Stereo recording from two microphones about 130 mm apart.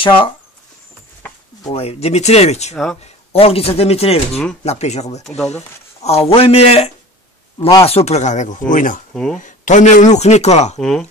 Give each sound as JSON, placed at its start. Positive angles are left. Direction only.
{"t": 1.7, "sound": "speech", "side_deg": 50}
{"t": 2.7, "sound": "speech", "side_deg": 0}
{"t": 3.0, "sound": "speech", "side_deg": 50}
{"t": 7.5, "sound": "speech", "side_deg": 35}
{"t": 7.8, "sound": "speech", "side_deg": 55}
{"t": 9.1, "sound": "speech", "side_deg": 5}
{"t": 9.4, "sound": "speech", "side_deg": 75}
{"t": 10.8, "sound": "speech", "side_deg": 5}